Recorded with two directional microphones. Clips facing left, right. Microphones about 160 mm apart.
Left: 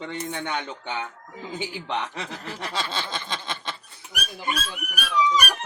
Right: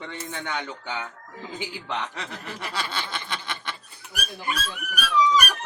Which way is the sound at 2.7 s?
25° left (ahead or behind).